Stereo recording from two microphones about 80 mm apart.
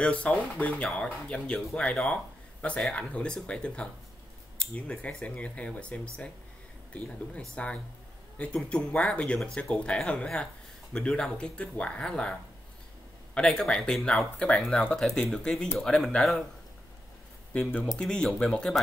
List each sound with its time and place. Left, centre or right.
0.0 s speech: centre
2.6 s speech: centre
14.8 s speech: centre
17.5 s speech: centre